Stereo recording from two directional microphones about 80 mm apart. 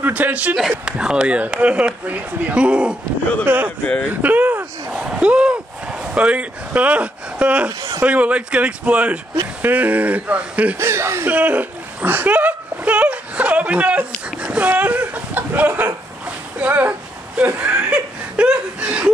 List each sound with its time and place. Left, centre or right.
0.0 s speech: centre
0.6 s speech: centre
3.8 s speech: left
4.1 s a sound: right
8.0 s speech: centre
10.8 s speech: right
11.2 s a sound: centre
17.4 s chuckle: centre